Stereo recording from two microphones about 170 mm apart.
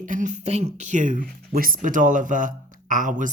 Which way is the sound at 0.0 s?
50° right (ahead or behind).